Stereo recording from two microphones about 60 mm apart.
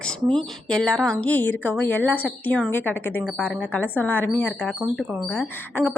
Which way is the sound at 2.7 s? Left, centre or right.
Left.